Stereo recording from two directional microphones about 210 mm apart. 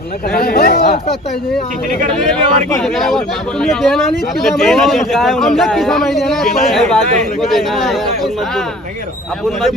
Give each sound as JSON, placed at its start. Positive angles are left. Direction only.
{"t": 0.4, "sound": "speech", "side_deg": 45}
{"t": 2.3, "sound": "a man's voice", "side_deg": 0}